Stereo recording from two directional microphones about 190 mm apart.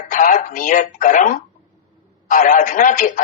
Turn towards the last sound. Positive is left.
turn(degrees=45)  # may be behind; listen again after turning